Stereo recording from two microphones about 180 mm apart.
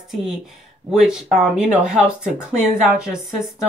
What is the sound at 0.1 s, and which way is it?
Speech, centre (ahead or behind).